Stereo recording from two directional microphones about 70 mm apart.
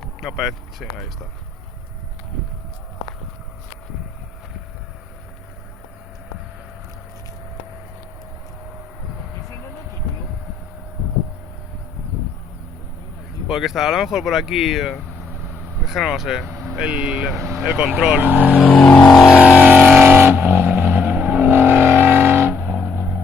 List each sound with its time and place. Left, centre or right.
0.0 s speech: centre
13.5 s speech: centre
16.7 s speech: centre
18.2 s speech: right
18.6 s vehicle: centre
19.4 s vehicle: right
20.1 s vehicle: right
21.4 s vehicle: right
22.7 s music: centre